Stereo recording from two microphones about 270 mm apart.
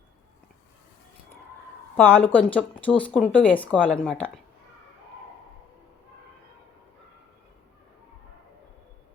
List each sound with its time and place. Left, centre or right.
2.0 s speech: centre